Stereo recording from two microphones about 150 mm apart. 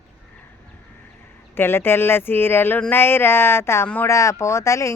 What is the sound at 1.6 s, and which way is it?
Speech, 15° left (ahead or behind).